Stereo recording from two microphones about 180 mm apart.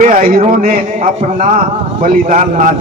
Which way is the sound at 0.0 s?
50° right (ahead or behind).